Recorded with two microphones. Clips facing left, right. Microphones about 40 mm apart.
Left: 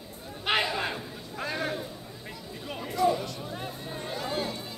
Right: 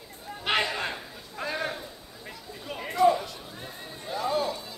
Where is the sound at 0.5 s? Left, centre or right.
Centre.